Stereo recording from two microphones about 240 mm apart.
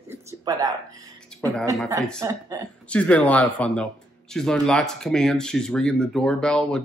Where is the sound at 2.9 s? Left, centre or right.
Centre.